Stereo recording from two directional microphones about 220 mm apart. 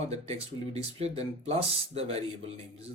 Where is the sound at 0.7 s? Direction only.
25° right (ahead or behind).